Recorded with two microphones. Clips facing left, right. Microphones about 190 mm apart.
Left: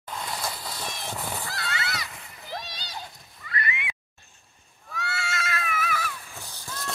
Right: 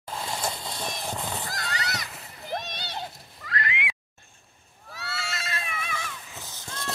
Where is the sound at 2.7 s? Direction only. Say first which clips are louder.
Right 4 dB; 65° right (ahead or behind); by 3.9 s 90° right.